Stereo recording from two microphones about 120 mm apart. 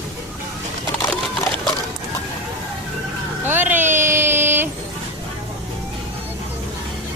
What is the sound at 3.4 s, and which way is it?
Vehicle, 15° right (ahead or behind).